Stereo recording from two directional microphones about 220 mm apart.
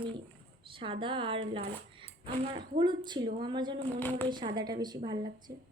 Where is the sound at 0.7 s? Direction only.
25° right (ahead or behind).